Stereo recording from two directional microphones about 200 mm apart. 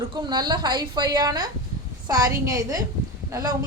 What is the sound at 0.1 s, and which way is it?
A woman's voice, 20° right (ahead or behind).